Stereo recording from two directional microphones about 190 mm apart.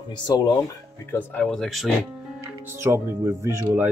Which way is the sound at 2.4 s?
15° right (ahead or behind).